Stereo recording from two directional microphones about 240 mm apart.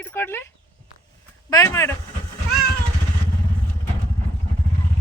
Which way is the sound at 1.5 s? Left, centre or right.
Centre.